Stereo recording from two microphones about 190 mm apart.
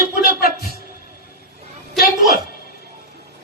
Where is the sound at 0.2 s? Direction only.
55° left (ahead or behind).